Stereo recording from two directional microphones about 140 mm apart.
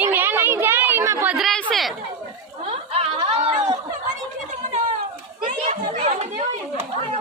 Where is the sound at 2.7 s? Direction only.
45° right (ahead or behind).